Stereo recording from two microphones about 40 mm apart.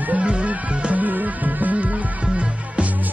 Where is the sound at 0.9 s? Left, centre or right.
Right.